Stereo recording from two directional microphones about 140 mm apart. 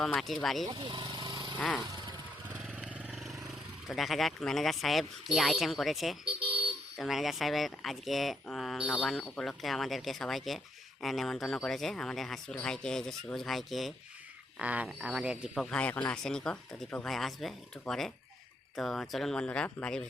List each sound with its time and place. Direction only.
0.0 s speech: centre (ahead or behind)
0.7 s vehicle: 35° right (ahead or behind)
1.5 s a sound: 10° left (ahead or behind)
3.1 s vehicle: centre (ahead or behind)
3.8 s speech: centre (ahead or behind)